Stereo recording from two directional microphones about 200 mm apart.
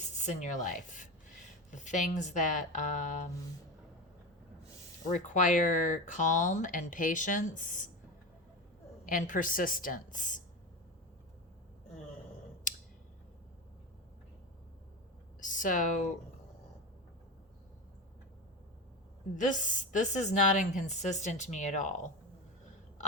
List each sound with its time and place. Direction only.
0.2 s speech: 35° left (ahead or behind)
5.1 s speech: 40° left (ahead or behind)
9.0 s speech: 40° left (ahead or behind)
12.7 s tick: 40° left (ahead or behind)
15.4 s speech: 40° left (ahead or behind)
19.4 s speech: 40° left (ahead or behind)